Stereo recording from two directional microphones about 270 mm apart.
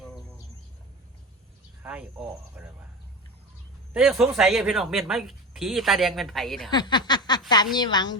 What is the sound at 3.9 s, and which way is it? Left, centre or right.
Speech, centre.